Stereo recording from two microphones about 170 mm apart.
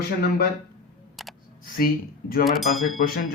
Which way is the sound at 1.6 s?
60° left (ahead or behind).